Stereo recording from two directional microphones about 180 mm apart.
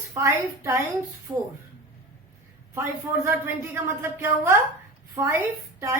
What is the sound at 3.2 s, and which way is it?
A woman's voice, 10° right (ahead or behind).